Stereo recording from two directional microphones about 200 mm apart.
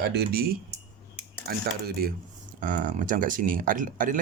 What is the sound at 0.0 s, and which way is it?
Speech, 55° right (ahead or behind).